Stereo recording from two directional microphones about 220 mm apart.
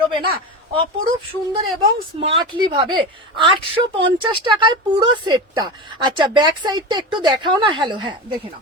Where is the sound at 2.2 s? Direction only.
25° right (ahead or behind).